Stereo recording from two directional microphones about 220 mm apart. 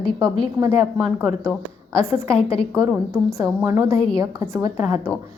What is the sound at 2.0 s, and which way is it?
A woman's voice, 10° right (ahead or behind).